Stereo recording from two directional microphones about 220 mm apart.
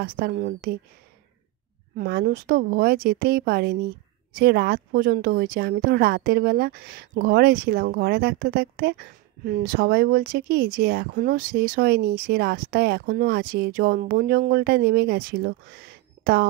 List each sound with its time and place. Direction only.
0.0 s speech: 40° right (ahead or behind)
2.0 s speech: 45° right (ahead or behind)